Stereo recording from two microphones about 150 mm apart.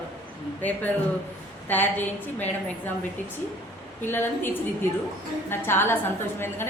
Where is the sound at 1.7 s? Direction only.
10° left (ahead or behind).